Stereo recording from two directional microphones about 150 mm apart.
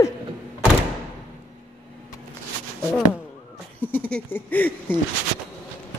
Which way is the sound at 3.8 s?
10° left (ahead or behind).